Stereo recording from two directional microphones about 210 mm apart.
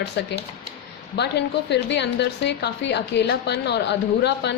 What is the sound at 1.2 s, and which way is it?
A woman's voice, 55° left (ahead or behind).